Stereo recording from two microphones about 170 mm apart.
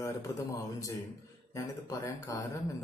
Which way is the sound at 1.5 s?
20° left (ahead or behind).